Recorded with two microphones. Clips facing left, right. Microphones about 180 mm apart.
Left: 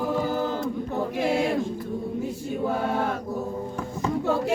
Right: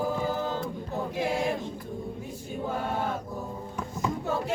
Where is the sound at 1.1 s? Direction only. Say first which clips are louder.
Left 4 dB; 75° left (ahead or behind).